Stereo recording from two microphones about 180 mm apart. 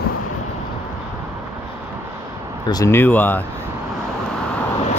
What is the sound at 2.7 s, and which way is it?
Speech, 15° left (ahead or behind).